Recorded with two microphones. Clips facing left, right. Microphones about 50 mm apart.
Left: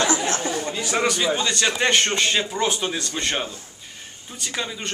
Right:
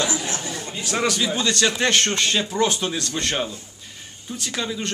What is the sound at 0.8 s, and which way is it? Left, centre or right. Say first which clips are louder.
A man's voice: even; centre.